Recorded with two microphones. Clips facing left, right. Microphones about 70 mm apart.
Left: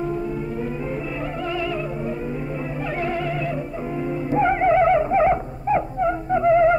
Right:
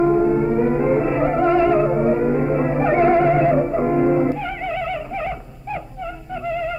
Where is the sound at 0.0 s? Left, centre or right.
Right.